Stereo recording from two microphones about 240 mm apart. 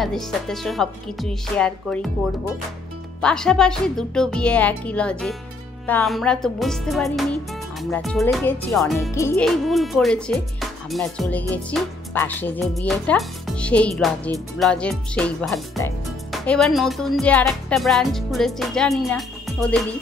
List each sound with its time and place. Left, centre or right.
0.0 s speech: centre
3.2 s speech: centre